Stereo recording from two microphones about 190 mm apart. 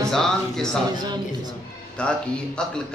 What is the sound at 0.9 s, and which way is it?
Speech, 20° right (ahead or behind).